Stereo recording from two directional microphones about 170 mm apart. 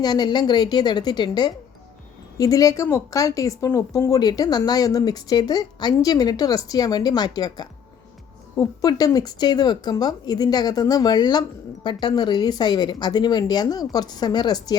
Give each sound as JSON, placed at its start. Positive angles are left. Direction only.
{"t": 0.0, "sound": "speech", "side_deg": 25}